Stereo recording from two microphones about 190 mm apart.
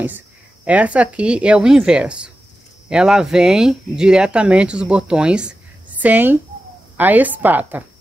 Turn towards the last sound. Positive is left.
turn(degrees=-10)  # may be behind; listen again after turning